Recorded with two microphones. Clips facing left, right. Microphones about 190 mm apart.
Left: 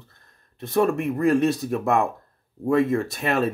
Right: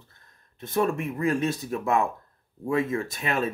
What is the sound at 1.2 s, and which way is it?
Speech, 65° left (ahead or behind).